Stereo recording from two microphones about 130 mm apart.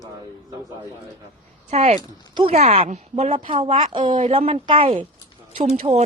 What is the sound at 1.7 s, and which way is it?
Speech, 55° right (ahead or behind).